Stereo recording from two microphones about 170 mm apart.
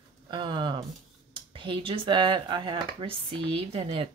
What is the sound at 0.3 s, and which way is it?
Speech, 25° right (ahead or behind).